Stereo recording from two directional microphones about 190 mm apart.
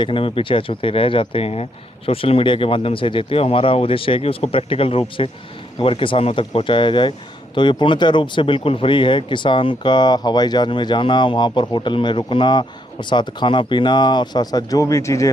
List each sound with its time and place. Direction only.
0.0 s speech: 30° left (ahead or behind)